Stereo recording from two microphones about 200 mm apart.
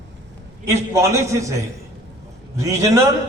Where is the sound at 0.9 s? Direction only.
15° right (ahead or behind).